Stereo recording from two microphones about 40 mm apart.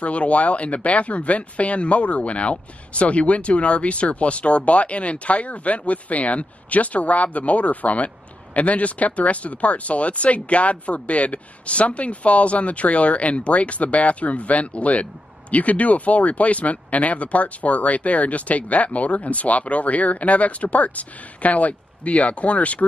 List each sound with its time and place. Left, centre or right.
0.0 s speech: left